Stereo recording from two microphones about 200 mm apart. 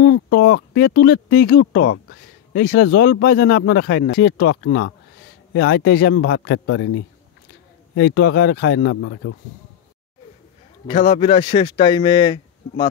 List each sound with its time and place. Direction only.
0.0 s speech: 55° left (ahead or behind); by 7.0 s 85° left
7.9 s speech: 65° left (ahead or behind); by 9.3 s 85° left
10.9 s speech: 25° left (ahead or behind)